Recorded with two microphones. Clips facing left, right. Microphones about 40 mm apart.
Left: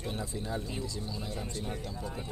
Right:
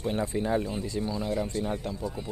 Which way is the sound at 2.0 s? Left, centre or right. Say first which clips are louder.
Right 5 dB; centre.